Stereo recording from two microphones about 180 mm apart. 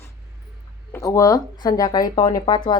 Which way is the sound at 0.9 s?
20° left (ahead or behind).